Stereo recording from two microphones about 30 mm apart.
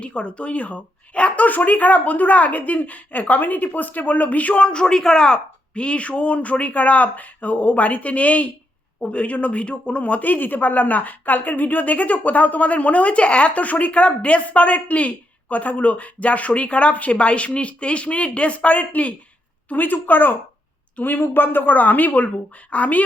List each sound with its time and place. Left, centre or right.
0.0 s speech: left
1.5 s a woman's voice: left
4.7 s a woman's voice: left
18.9 s a woman's voice: left
19.7 s a woman's voice: left
21.0 s a woman's voice: left
21.7 s a woman's voice: left
22.7 s a woman's voice: left